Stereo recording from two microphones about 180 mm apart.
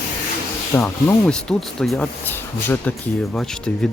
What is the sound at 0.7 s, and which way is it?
Speech, 15° left (ahead or behind).